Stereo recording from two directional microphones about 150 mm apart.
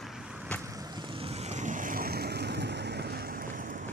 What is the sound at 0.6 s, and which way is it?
Vehicle, 25° right (ahead or behind).